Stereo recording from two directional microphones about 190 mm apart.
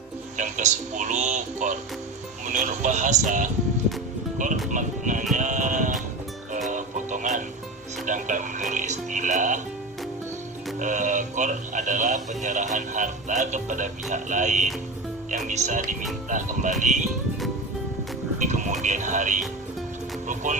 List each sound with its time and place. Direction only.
0.3 s speech: 40° right (ahead or behind)
4.7 s speech: 40° right (ahead or behind)
6.7 s music: 40° right (ahead or behind)
8.0 s speech: 40° right (ahead or behind)
10.8 s speech: 40° right (ahead or behind)
18.4 s speech: 40° right (ahead or behind)